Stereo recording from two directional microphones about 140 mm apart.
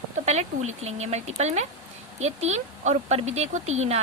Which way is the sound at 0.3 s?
55° right (ahead or behind).